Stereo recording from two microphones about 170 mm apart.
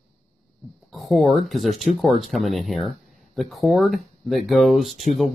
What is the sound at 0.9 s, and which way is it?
Speech, centre (ahead or behind).